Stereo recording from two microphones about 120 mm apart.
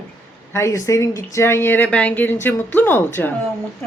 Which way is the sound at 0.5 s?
25° left (ahead or behind).